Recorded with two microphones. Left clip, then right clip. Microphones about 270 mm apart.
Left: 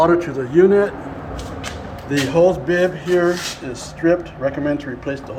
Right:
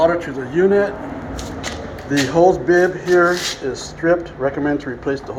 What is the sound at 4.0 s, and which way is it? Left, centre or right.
Speech, centre.